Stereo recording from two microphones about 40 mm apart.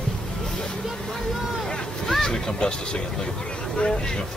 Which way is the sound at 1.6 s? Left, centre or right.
Centre.